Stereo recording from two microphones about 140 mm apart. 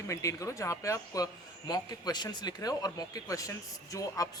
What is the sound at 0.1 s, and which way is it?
A man's voice, 20° left (ahead or behind).